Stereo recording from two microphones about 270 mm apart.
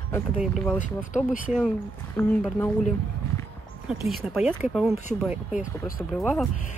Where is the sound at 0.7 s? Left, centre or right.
Left.